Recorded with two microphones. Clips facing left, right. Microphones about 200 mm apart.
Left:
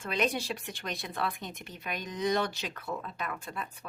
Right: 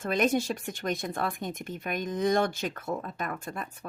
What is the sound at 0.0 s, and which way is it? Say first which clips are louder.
Speech: right 5 dB; 45° right (ahead or behind).